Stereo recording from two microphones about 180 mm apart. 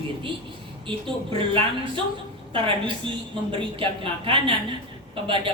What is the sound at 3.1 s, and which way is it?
A woman's voice, 30° right (ahead or behind).